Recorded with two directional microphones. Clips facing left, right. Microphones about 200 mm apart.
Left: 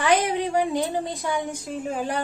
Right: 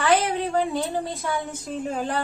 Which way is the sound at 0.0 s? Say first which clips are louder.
Even; 15° left (ahead or behind).